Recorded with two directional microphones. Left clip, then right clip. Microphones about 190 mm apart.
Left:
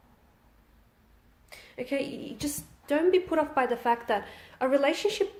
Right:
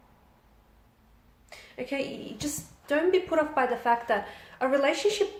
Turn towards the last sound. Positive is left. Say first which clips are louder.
# right 1 dB
turn(degrees=40)  # may be behind; listen again after turning